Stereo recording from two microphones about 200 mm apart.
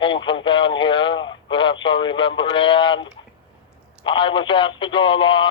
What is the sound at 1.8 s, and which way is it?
Speech, 25° left (ahead or behind).